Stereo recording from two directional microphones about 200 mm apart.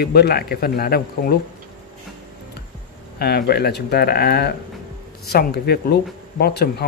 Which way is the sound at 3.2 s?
55° left (ahead or behind).